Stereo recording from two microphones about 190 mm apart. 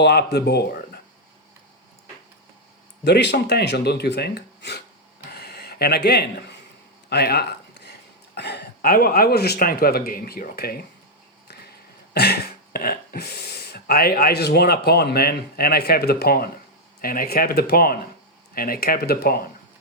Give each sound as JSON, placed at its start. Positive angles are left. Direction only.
{"t": 0.0, "sound": "speech", "side_deg": 60}
{"t": 3.0, "sound": "speech", "side_deg": 65}
{"t": 5.3, "sound": "a sound", "side_deg": 60}
{"t": 8.4, "sound": "a man's voice", "side_deg": 60}
{"t": 12.1, "sound": "a man's voice", "side_deg": 55}